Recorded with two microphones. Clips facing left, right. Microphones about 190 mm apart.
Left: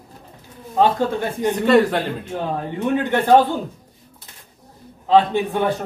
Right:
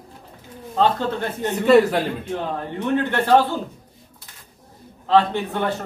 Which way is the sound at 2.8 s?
15° left (ahead or behind).